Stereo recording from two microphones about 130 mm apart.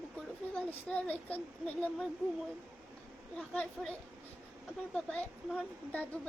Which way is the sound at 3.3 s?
10° left (ahead or behind).